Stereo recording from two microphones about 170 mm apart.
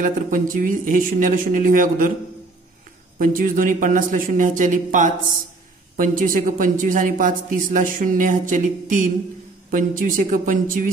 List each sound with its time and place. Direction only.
0.0 s a woman's voice: 50° right (ahead or behind)
3.2 s a woman's voice: 55° right (ahead or behind)